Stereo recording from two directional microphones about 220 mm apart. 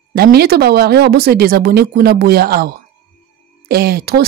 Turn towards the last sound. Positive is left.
turn(degrees=-45)  # may be behind; listen again after turning